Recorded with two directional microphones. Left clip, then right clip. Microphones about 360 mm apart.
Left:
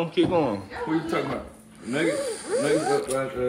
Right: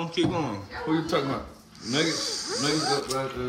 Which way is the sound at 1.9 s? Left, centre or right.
Centre.